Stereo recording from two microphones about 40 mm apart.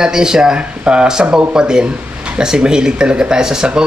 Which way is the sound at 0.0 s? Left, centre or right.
Centre.